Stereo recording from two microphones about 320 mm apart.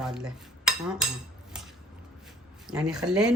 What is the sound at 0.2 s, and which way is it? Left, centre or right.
Speech, centre.